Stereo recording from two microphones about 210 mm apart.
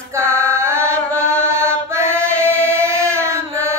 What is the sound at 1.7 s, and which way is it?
Chant, 10° right (ahead or behind).